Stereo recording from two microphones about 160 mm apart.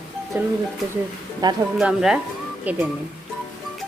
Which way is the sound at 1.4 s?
25° right (ahead or behind).